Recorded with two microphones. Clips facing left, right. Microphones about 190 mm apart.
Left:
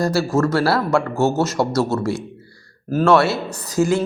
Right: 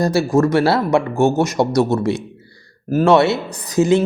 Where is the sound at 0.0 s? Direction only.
20° right (ahead or behind).